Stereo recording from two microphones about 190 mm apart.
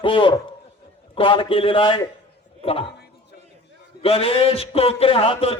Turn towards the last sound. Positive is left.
turn(degrees=30)  # may be behind; listen again after turning